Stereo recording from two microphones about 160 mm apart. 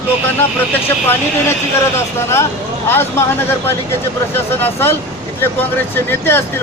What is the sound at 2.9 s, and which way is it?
Speech, 15° left (ahead or behind).